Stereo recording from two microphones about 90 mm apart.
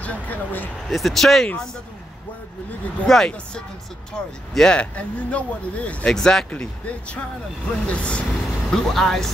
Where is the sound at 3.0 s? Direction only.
5° left (ahead or behind).